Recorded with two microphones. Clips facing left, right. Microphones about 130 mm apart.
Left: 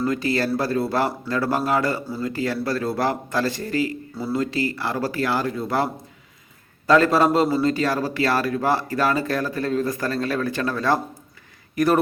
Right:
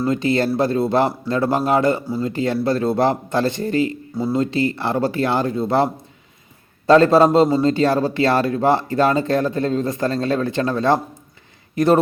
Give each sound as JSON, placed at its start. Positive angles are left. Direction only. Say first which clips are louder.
{"t": 0.0, "sound": "speech", "louder": "right 4 dB", "side_deg": -25}